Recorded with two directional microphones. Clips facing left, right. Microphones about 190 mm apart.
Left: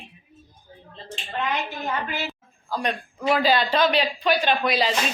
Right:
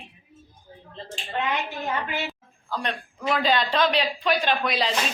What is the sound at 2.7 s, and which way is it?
A woman's voice, 10° left (ahead or behind).